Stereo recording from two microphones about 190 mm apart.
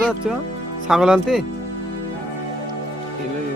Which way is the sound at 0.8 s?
5° right (ahead or behind).